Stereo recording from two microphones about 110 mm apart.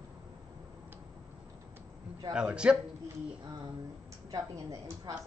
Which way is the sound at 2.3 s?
10° right (ahead or behind).